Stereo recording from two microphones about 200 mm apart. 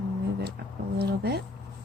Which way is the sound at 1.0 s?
55° right (ahead or behind).